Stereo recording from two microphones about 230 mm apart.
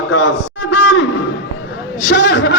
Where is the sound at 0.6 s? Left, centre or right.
Left.